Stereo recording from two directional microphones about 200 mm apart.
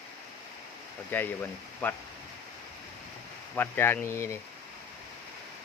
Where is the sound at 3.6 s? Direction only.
10° left (ahead or behind).